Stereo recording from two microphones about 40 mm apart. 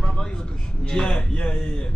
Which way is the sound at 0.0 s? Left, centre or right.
Centre.